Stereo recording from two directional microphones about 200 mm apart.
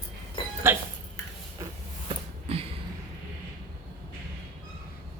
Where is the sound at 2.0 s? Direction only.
30° right (ahead or behind).